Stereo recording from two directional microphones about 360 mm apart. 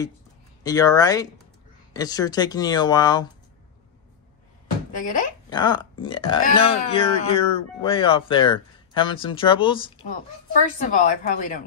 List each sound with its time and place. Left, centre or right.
0.7 s speech: centre
4.9 s a woman's voice: left